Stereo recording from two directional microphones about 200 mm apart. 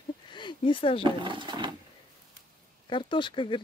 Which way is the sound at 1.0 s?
25° right (ahead or behind).